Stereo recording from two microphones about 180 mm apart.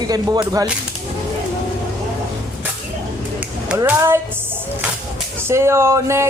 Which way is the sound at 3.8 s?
15° right (ahead or behind).